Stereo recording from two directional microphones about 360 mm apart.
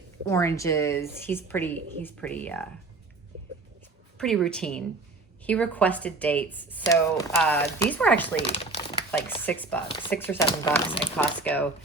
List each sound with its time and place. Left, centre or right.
0.3 s a woman's voice: centre
4.2 s speech: centre
8.4 s speech: centre
9.3 s a woman's voice: centre